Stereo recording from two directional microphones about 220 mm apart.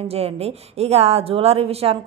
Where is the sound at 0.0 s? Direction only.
25° right (ahead or behind).